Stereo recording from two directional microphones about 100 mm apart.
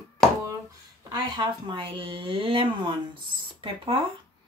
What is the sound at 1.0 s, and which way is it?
Speech, 45° right (ahead or behind).